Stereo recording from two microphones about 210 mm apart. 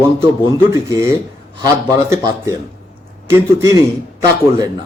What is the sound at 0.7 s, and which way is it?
Speech, 15° right (ahead or behind).